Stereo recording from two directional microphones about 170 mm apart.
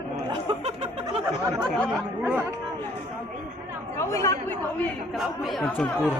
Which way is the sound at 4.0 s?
15° left (ahead or behind).